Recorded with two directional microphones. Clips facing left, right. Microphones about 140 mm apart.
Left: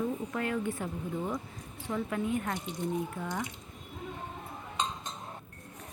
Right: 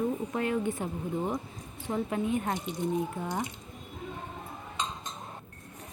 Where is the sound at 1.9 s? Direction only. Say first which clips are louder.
Right 2 dB; 25° right (ahead or behind).